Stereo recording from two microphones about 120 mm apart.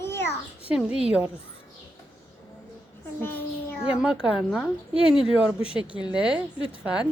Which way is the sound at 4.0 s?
5° right (ahead or behind).